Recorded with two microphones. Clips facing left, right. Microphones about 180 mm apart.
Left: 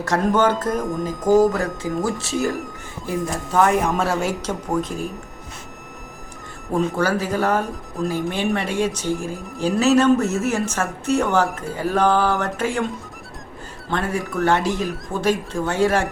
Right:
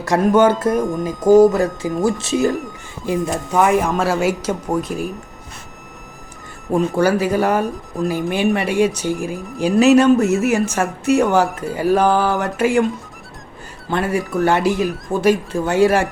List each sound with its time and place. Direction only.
0.0 s speech: 10° right (ahead or behind)
6.9 s speech: 10° right (ahead or behind)
13.8 s speech: 10° right (ahead or behind)